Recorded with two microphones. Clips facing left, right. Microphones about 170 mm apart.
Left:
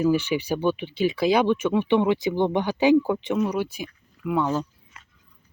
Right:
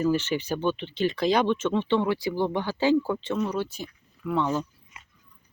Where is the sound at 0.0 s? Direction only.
10° left (ahead or behind).